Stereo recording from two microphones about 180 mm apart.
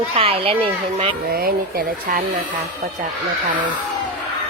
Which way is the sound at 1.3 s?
55° right (ahead or behind).